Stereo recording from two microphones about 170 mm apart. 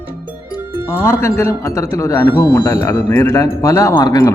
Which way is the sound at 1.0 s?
15° left (ahead or behind).